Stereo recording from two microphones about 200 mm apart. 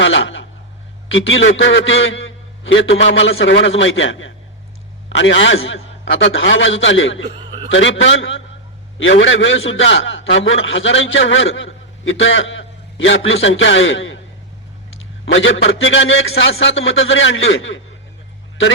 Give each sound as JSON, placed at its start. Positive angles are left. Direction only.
{"t": 0.0, "sound": "a man's voice", "side_deg": 70}
{"t": 15.3, "sound": "a man's voice", "side_deg": 70}